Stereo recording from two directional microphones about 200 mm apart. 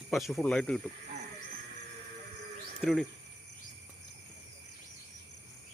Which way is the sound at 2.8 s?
Centre (ahead or behind).